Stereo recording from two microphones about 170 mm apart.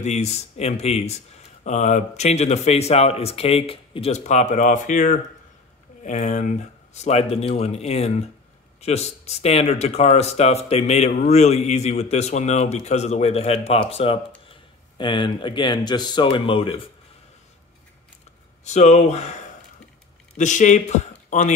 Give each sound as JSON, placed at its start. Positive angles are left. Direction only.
{"t": 0.0, "sound": "speech", "side_deg": 40}
{"t": 18.6, "sound": "speech", "side_deg": 40}
{"t": 20.3, "sound": "speech", "side_deg": 45}